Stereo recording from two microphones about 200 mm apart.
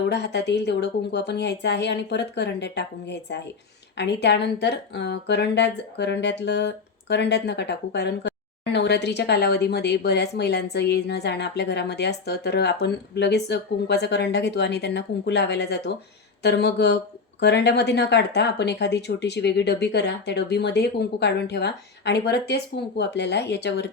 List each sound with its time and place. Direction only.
0.1 s speech: 55° left (ahead or behind)